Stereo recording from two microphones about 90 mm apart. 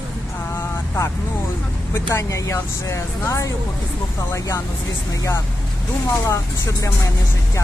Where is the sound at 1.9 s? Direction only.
35° left (ahead or behind).